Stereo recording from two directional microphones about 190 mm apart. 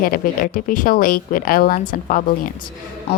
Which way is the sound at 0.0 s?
50° left (ahead or behind).